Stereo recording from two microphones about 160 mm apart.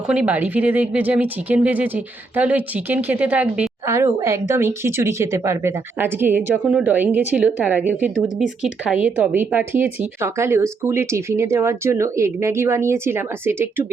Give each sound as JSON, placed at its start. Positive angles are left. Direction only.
{"t": 0.1, "sound": "speech", "side_deg": -10}